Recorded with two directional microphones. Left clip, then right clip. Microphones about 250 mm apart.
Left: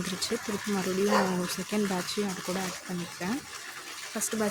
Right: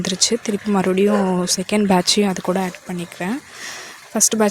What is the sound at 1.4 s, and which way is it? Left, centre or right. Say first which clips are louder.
Speech: right 12 dB; right.